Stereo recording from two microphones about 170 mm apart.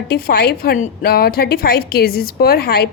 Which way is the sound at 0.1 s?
70° left (ahead or behind).